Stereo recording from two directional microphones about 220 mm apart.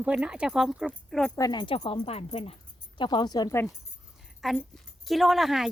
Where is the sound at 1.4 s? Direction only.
20° left (ahead or behind).